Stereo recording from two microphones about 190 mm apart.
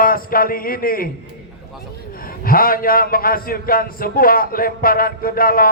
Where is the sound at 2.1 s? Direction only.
50° left (ahead or behind).